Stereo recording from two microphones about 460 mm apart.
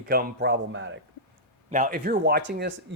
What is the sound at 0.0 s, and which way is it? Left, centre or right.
Speech, centre.